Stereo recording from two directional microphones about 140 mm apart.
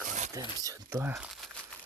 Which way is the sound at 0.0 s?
65° right (ahead or behind).